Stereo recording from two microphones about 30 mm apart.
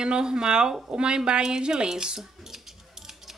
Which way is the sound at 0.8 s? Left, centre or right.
Right.